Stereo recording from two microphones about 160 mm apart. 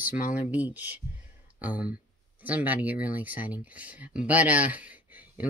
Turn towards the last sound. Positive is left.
turn(degrees=-10)  # may be behind; listen again after turning